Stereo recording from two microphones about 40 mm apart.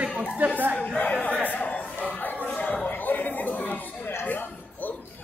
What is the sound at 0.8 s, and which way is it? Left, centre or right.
Speech, left.